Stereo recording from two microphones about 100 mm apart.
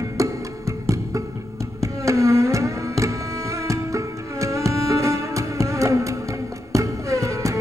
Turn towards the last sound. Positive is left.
turn(degrees=-30)  # may be behind; listen again after turning